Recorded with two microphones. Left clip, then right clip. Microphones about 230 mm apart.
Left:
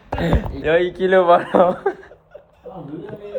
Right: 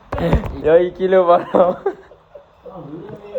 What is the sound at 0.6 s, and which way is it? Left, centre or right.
Speech, centre.